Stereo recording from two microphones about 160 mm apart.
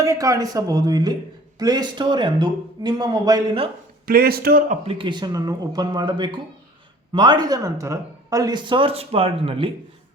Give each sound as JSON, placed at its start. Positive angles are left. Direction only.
{"t": 0.0, "sound": "a man's voice", "side_deg": -20}
{"t": 4.0, "sound": "a man's voice", "side_deg": -65}
{"t": 4.7, "sound": "a man's voice", "side_deg": -35}